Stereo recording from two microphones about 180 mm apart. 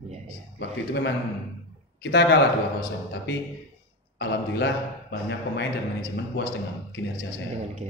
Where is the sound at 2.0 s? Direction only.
85° left.